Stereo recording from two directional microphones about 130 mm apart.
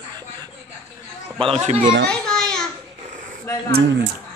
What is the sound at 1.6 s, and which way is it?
Speech, 65° right (ahead or behind).